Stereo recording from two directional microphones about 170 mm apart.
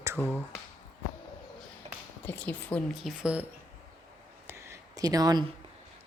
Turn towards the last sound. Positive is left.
turn(degrees=-25)  # may be behind; listen again after turning